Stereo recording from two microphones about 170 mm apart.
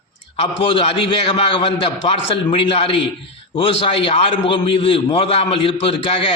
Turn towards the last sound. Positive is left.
turn(degrees=30)  # may be behind; listen again after turning